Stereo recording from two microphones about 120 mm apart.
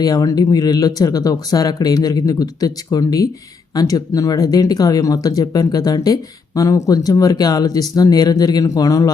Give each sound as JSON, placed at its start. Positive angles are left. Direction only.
{"t": 0.0, "sound": "speech", "side_deg": 30}